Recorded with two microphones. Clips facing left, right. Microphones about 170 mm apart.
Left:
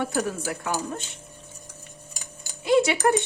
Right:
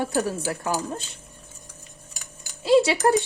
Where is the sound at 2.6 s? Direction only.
30° right (ahead or behind).